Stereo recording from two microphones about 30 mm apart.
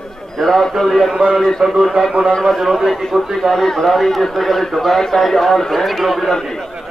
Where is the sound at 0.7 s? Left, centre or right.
Centre.